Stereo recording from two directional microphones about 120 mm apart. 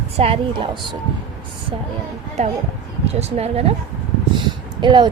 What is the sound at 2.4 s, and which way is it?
A woman's voice, 65° right (ahead or behind).